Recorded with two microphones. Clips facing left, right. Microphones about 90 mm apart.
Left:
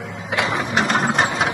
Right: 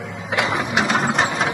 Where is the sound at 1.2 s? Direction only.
10° left (ahead or behind).